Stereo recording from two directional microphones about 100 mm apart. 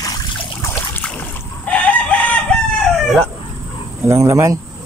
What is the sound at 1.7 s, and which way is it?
Chicken, 10° left (ahead or behind).